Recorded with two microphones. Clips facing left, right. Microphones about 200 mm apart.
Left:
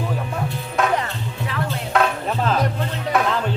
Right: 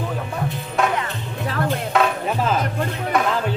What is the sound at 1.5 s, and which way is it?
Music, 50° right (ahead or behind).